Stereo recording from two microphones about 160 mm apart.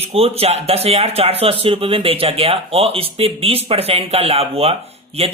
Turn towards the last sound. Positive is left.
turn(degrees=-40)  # may be behind; listen again after turning